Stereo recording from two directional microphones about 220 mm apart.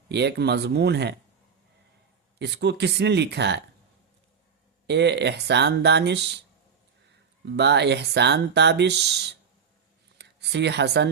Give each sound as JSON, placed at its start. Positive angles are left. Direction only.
{"t": 0.1, "sound": "speech", "side_deg": -50}
{"t": 2.4, "sound": "speech", "side_deg": -50}
{"t": 4.9, "sound": "speech", "side_deg": -50}
{"t": 7.5, "sound": "speech", "side_deg": -50}